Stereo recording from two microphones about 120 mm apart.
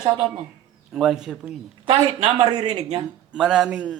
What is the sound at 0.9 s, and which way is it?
Speech, 5° right (ahead or behind).